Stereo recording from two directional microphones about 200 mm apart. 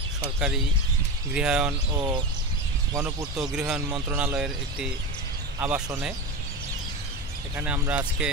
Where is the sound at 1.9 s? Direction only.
20° right (ahead or behind).